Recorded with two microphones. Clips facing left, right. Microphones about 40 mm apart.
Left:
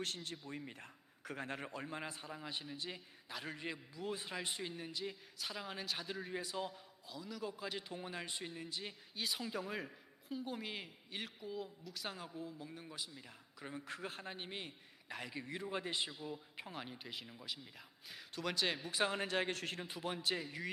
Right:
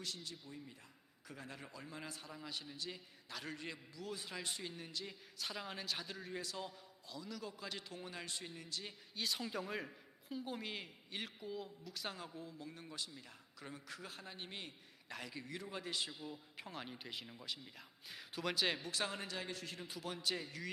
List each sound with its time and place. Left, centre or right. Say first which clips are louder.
0.0 s a man's voice: left 4 dB; left; by 13.8 s centre
13.8 s speech: left 5 dB; left
14.3 s a man's voice: left 2 dB; centre
18.8 s a man's voice: left 4 dB; centre
19.2 s a man's voice: left 7 dB; left
19.8 s a man's voice: left 2 dB; left